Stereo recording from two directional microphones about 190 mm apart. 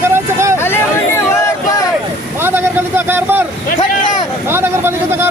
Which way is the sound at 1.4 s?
15° left (ahead or behind).